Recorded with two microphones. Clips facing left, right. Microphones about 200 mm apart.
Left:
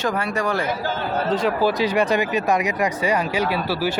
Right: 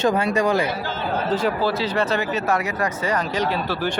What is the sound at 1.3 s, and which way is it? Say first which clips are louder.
Speech: left 1 dB; centre (ahead or behind).